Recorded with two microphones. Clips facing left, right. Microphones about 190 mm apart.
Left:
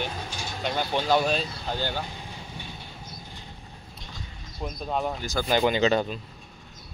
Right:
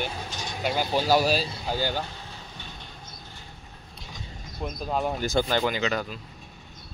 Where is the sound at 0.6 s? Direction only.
5° right (ahead or behind).